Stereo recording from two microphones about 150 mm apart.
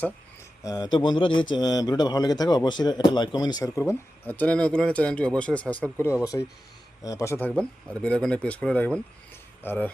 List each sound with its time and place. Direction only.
0.6 s a man's voice: 25° left (ahead or behind); by 9.9 s 10° left (ahead or behind)